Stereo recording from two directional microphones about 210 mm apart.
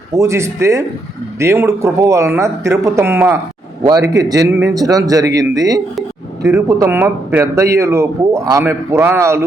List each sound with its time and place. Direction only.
0.2 s speech: 15° right (ahead or behind)